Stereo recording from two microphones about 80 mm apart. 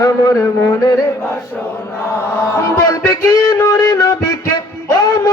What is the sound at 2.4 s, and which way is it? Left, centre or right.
Music, left.